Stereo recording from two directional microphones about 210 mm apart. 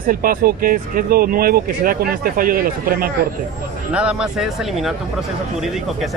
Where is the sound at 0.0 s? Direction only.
40° right (ahead or behind).